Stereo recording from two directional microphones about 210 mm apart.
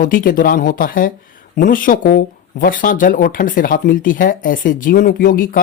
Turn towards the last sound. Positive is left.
turn(degrees=40)  # may be behind; listen again after turning